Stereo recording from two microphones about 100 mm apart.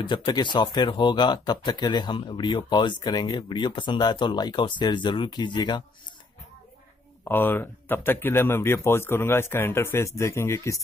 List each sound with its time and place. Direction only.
0.0 s speech: 50° left (ahead or behind)
7.2 s speech: 20° left (ahead or behind)